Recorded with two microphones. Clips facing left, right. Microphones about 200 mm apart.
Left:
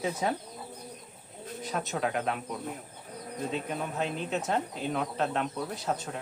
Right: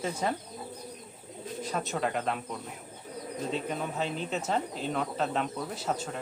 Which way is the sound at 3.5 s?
Centre (ahead or behind).